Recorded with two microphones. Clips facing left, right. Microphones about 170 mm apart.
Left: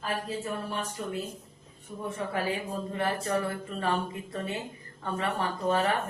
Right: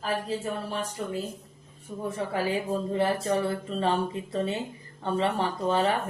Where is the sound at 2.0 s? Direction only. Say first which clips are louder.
Right 3 dB; 30° right (ahead or behind).